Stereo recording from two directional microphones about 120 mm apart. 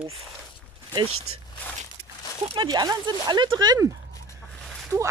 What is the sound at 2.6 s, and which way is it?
Speech, 35° right (ahead or behind).